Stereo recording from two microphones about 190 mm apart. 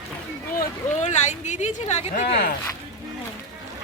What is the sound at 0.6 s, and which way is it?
Speech, 40° left (ahead or behind).